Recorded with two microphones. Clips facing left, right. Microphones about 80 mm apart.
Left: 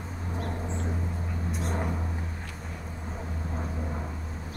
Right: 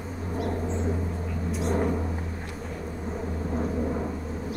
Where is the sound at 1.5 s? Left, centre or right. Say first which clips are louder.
Right 7 dB; centre.